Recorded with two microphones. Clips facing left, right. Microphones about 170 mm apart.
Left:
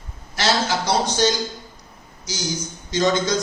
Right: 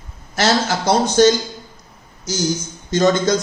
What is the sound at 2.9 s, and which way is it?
Speech, 50° right (ahead or behind).